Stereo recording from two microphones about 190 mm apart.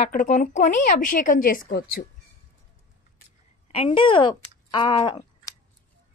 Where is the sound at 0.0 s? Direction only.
40° left (ahead or behind).